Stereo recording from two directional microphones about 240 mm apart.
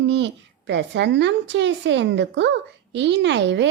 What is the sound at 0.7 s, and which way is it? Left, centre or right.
A woman's voice, right.